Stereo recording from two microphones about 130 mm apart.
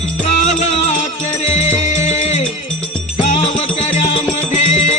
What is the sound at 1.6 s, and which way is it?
Music, 60° left (ahead or behind).